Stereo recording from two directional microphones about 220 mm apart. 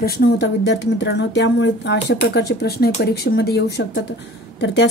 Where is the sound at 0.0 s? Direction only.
45° left (ahead or behind).